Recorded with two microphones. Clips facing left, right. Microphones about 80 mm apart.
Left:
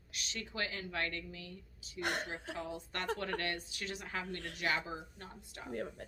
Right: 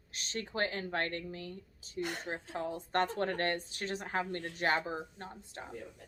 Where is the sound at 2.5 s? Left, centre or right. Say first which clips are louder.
Right 11 dB; right.